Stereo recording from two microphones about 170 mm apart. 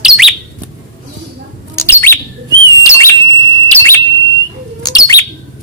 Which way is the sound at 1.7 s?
15° left (ahead or behind).